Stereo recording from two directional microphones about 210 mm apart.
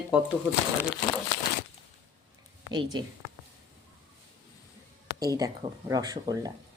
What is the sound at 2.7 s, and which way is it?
Speech, 20° right (ahead or behind).